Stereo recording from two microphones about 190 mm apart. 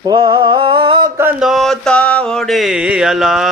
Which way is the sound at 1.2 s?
5° right (ahead or behind).